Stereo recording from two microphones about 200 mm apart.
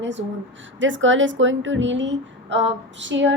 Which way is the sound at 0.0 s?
65° right (ahead or behind).